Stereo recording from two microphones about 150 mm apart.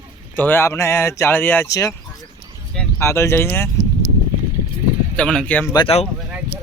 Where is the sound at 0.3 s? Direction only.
10° left (ahead or behind).